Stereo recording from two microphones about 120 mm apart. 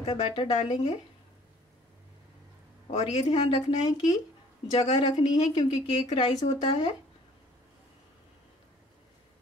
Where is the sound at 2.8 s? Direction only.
65° left (ahead or behind).